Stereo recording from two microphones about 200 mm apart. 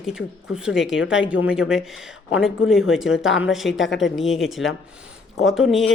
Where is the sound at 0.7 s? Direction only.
65° left (ahead or behind).